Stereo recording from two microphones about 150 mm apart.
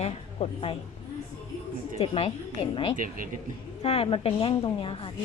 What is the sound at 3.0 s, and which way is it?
Speech, 65° right (ahead or behind).